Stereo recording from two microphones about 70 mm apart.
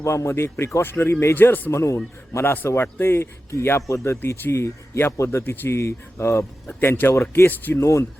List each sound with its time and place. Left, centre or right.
0.0 s a man's voice: left
1.7 s a man's voice: left
6.7 s speech: left
7.1 s a man's voice: left
7.4 s speech: left
7.8 s a man's voice: left